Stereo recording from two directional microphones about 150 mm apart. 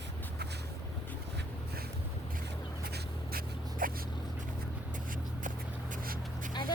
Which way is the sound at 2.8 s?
85° right.